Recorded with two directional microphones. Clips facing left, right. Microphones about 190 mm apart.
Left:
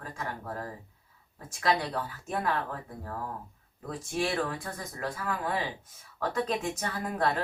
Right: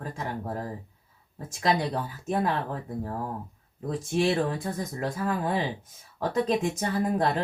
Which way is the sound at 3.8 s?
25° right (ahead or behind).